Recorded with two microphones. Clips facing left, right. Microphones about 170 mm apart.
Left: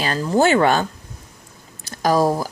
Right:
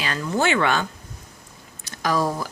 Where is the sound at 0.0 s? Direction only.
35° left (ahead or behind).